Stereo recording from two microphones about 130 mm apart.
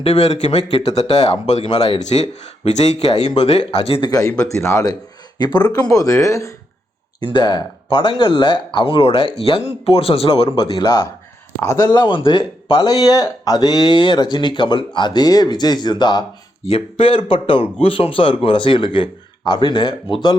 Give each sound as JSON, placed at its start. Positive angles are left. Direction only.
{"t": 0.0, "sound": "speech", "side_deg": 55}
{"t": 4.1, "sound": "speech", "side_deg": 25}
{"t": 7.2, "sound": "speech", "side_deg": 35}
{"t": 16.6, "sound": "speech", "side_deg": 45}